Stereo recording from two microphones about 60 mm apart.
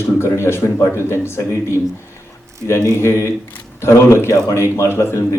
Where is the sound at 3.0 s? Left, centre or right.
Left.